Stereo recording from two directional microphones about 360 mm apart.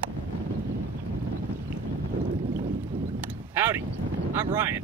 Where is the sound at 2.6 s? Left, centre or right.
Centre.